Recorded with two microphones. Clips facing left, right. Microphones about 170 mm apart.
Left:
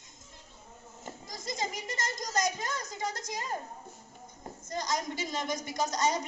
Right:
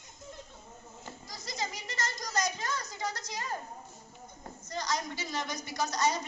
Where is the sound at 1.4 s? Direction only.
20° left (ahead or behind).